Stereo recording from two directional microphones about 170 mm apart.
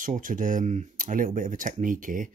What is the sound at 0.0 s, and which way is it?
Speech, 50° right (ahead or behind).